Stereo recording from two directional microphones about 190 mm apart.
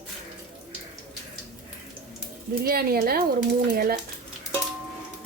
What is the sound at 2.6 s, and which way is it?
Speech, 50° right (ahead or behind).